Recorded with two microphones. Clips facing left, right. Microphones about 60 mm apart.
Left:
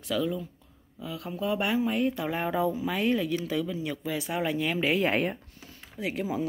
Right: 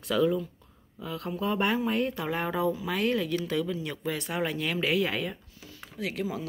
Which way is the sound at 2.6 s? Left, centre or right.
Left.